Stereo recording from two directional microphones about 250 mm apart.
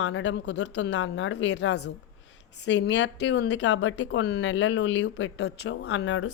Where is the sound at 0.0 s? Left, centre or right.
Left.